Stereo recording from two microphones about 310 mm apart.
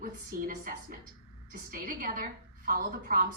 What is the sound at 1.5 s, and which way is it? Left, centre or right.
A woman's voice, right.